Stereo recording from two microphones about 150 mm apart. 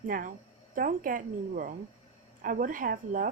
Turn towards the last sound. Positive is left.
turn(degrees=-65)  # may be behind; listen again after turning